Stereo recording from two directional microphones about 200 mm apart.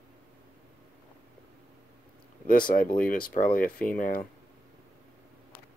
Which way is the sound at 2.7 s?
40° left (ahead or behind).